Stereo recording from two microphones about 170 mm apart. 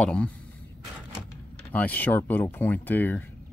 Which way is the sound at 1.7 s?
10° left (ahead or behind).